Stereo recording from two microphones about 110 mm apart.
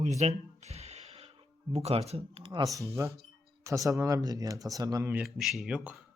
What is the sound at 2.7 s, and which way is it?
Speech, 25° right (ahead or behind).